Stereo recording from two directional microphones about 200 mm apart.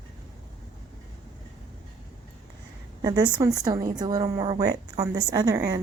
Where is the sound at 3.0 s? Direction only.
20° right (ahead or behind).